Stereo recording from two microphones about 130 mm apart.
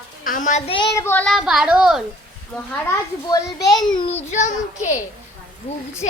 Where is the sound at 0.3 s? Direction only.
75° left (ahead or behind).